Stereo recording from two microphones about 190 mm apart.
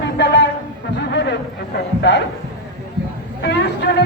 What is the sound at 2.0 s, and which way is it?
Speech, 65° left (ahead or behind).